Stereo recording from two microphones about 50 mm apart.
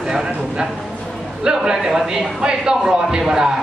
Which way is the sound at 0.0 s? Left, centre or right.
Centre.